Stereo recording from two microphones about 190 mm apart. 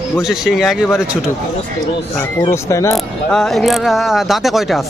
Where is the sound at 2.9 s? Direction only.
Centre (ahead or behind).